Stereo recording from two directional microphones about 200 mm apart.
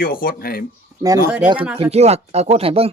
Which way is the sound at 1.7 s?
30° right (ahead or behind).